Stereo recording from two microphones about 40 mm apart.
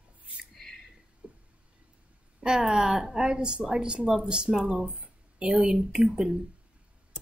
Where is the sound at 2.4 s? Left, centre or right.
Centre.